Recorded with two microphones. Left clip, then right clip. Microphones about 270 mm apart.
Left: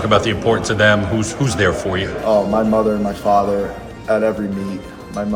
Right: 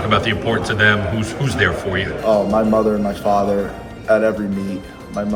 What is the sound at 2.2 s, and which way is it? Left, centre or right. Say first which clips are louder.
Speech: even; centre.